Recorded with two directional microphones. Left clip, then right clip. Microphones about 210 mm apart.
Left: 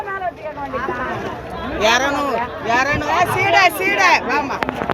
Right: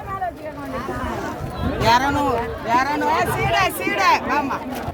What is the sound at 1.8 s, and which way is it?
Speech, 15° right (ahead or behind).